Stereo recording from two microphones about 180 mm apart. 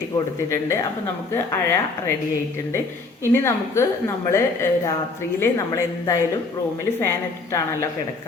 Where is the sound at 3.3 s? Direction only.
15° left (ahead or behind).